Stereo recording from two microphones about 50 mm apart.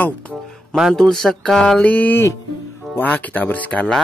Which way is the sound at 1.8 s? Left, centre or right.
Left.